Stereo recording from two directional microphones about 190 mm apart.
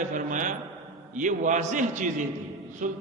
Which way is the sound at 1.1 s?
40° right (ahead or behind).